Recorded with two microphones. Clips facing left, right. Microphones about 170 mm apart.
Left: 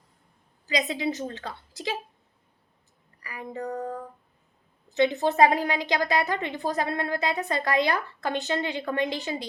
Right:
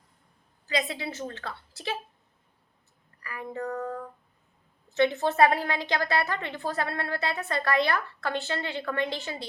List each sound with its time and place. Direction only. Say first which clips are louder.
0.7 s a woman's voice: left 3 dB; 15° left (ahead or behind)
3.2 s a sound: even; 15° left (ahead or behind)
4.9 s a woman's voice: left 2 dB; 15° left (ahead or behind)